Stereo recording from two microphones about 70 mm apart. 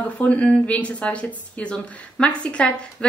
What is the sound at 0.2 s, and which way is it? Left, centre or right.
A woman's voice, centre.